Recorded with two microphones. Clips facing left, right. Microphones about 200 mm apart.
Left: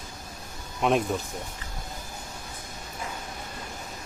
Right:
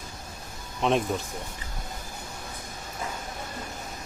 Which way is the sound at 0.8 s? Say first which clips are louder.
Left 1 dB; 5° left (ahead or behind).